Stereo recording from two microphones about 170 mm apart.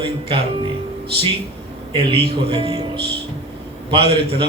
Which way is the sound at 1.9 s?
35° right (ahead or behind).